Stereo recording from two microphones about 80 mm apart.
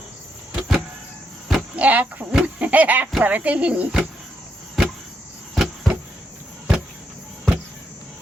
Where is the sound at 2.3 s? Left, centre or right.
Centre.